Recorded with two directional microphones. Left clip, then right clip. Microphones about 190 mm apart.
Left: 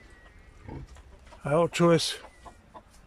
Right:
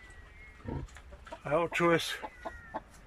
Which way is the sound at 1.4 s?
20° left (ahead or behind).